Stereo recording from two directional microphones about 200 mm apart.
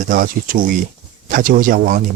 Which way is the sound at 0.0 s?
45° right (ahead or behind).